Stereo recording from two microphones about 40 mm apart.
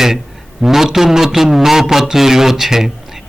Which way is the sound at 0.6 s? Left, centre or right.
Centre.